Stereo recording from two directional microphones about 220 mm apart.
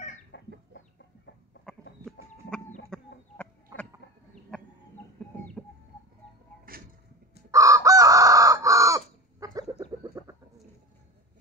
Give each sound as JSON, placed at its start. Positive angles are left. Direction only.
{"t": 0.3, "sound": "chicken", "side_deg": 55}
{"t": 1.7, "sound": "chicken", "side_deg": 5}
{"t": 2.9, "sound": "chicken", "side_deg": 5}
{"t": 6.7, "sound": "a sound", "side_deg": -40}
{"t": 7.5, "sound": "chicken", "side_deg": -15}